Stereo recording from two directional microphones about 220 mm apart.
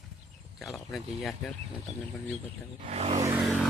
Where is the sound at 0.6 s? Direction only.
Centre (ahead or behind).